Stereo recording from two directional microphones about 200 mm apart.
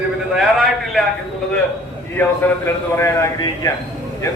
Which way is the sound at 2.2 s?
10° left (ahead or behind).